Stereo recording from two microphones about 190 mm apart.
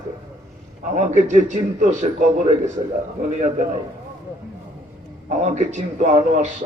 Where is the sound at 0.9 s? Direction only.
40° right (ahead or behind).